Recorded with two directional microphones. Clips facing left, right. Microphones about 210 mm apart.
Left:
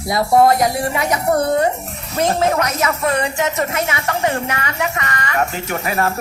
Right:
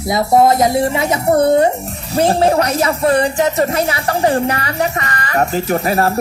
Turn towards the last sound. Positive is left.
turn(degrees=-35)  # may be behind; listen again after turning